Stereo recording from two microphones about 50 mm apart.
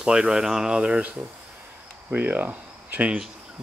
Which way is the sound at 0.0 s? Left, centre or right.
Centre.